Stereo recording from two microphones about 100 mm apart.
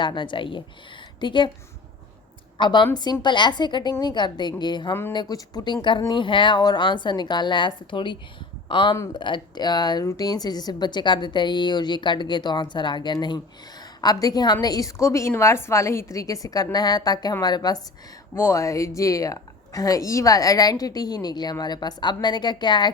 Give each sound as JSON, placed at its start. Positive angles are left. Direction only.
{"t": 0.0, "sound": "a woman's voice", "side_deg": 50}
{"t": 2.6, "sound": "a woman's voice", "side_deg": 50}
{"t": 18.3, "sound": "a woman's voice", "side_deg": 25}